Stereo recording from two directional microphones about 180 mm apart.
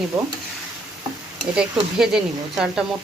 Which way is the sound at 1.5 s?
5° right (ahead or behind).